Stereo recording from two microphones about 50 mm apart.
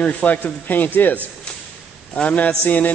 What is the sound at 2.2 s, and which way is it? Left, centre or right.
Speech, left.